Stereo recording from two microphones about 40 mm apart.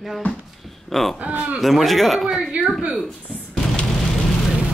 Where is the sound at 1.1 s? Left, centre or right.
Right.